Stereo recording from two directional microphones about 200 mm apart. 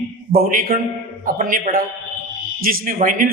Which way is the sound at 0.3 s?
45° right (ahead or behind).